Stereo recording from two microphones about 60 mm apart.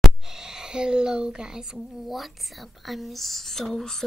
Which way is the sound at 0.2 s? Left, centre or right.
Centre.